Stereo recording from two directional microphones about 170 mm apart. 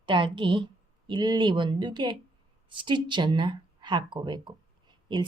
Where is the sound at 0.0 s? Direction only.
30° right (ahead or behind).